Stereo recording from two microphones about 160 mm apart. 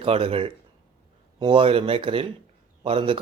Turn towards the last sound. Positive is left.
turn(degrees=-35)  # may be behind; listen again after turning